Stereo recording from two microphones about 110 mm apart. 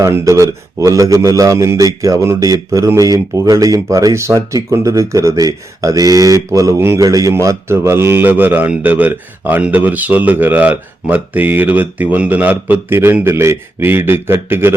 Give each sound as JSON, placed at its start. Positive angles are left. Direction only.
{"t": 0.0, "sound": "a man's voice", "side_deg": -30}